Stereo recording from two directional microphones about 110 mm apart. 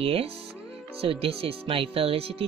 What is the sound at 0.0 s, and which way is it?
Speech, 60° right (ahead or behind).